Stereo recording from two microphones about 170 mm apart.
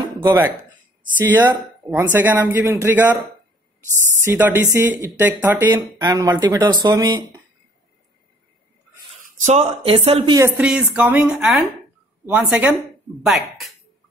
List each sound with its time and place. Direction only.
0.2 s speech: 20° right (ahead or behind)
1.4 s speech: 25° right (ahead or behind)
2.1 s speech: 10° right (ahead or behind)
4.2 s speech: 15° right (ahead or behind)
9.4 s speech: 40° right (ahead or behind)
10.6 s speech: 5° right (ahead or behind)